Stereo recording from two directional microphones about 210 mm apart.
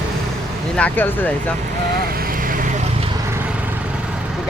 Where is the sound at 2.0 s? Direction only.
45° right (ahead or behind).